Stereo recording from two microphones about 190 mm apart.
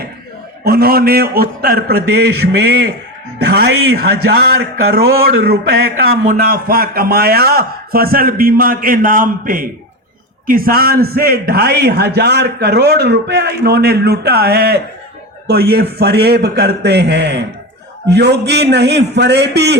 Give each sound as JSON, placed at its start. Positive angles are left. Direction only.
{"t": 0.6, "sound": "a man's voice", "side_deg": -55}